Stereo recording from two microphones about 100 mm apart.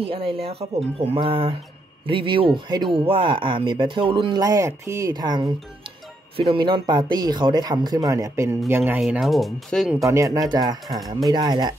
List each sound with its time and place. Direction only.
0.0 s speech: 65° right (ahead or behind)
4.4 s speech: 35° right (ahead or behind)
5.1 s speech: 45° right (ahead or behind)
6.3 s speech: 60° right (ahead or behind); by 9.0 s 20° right (ahead or behind)
9.2 s speech: centre (ahead or behind)
10.0 s speech: 35° right (ahead or behind)